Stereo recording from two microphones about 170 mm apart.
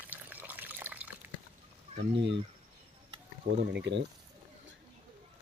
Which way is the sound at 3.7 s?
90° right.